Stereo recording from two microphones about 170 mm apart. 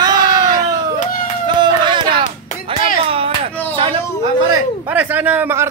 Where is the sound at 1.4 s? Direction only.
25° right (ahead or behind).